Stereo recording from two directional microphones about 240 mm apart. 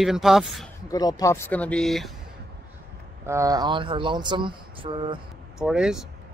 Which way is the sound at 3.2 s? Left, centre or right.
Centre.